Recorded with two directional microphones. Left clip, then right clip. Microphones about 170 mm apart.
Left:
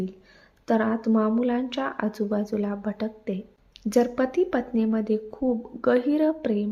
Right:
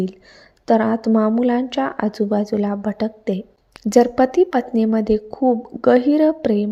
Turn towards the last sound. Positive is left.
turn(degrees=-35)  # may be behind; listen again after turning